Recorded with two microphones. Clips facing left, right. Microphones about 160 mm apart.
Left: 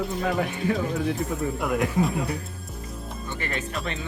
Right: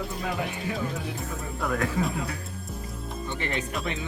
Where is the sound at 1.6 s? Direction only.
10° left (ahead or behind).